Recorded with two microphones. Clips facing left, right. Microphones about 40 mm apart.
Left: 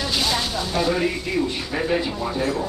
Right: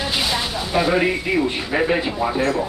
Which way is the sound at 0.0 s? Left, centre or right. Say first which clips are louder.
Right 1 dB; right.